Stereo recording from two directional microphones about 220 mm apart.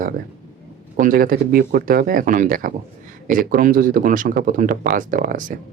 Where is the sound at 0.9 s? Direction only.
40° right (ahead or behind).